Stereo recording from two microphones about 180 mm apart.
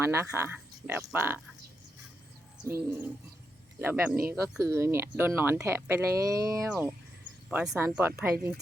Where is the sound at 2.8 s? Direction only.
10° right (ahead or behind).